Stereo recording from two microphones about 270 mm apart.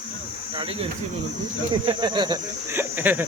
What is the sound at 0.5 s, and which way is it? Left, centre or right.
Speech, right.